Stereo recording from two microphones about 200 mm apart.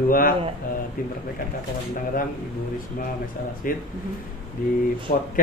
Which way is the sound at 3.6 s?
45° left (ahead or behind).